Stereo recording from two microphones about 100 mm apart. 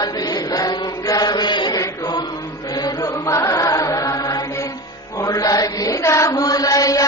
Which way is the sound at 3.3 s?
35° left (ahead or behind).